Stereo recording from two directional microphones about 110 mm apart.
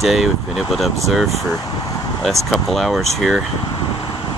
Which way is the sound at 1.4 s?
30° left (ahead or behind).